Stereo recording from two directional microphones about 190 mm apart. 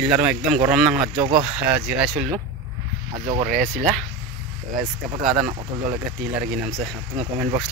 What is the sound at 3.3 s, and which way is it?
Speech, 40° right (ahead or behind).